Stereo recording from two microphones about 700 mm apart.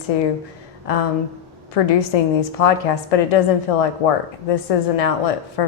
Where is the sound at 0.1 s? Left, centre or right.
Left.